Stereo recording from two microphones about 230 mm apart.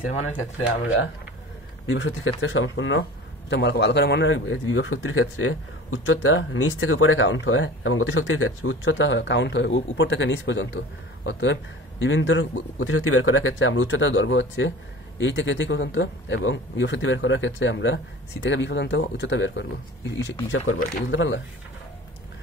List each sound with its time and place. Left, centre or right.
1.9 s speech: left